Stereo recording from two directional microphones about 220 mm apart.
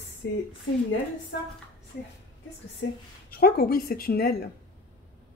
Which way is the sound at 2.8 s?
50° left (ahead or behind).